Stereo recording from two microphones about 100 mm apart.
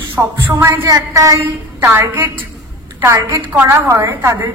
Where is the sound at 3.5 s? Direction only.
25° right (ahead or behind).